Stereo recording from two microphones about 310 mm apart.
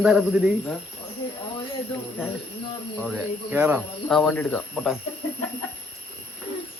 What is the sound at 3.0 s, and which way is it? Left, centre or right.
Speech, centre.